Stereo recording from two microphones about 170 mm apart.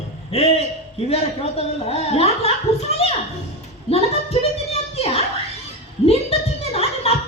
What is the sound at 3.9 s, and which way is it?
Speech, 35° left (ahead or behind).